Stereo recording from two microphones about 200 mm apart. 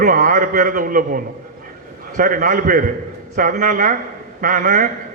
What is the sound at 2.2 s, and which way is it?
A man's voice, 40° right (ahead or behind).